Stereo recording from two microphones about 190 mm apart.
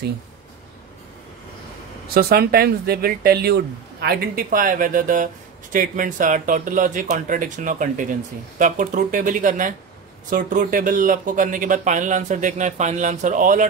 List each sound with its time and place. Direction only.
2.1 s speech: 55° right (ahead or behind)